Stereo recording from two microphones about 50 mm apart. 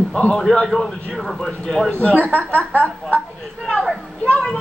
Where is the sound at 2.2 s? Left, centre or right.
Left.